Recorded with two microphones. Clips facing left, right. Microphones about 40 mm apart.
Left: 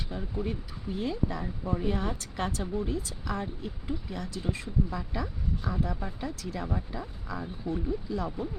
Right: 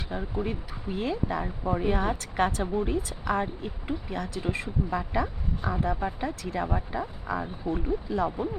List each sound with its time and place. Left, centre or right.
0.1 s a woman's voice: right